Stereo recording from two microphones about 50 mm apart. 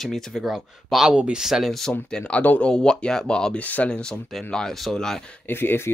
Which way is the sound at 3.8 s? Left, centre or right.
Centre.